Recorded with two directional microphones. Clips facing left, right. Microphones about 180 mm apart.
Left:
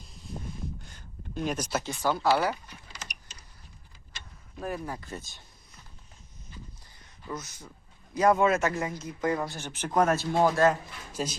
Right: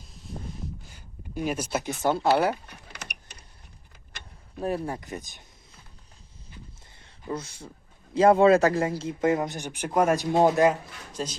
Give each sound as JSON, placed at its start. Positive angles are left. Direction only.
{"t": 0.0, "sound": "a sound", "side_deg": 0}
{"t": 2.0, "sound": "speech", "side_deg": -25}
{"t": 2.6, "sound": "power windows", "side_deg": -60}
{"t": 4.6, "sound": "speech", "side_deg": -30}
{"t": 4.9, "sound": "speech", "side_deg": -15}
{"t": 7.0, "sound": "speech", "side_deg": -30}
{"t": 11.1, "sound": "speech", "side_deg": 10}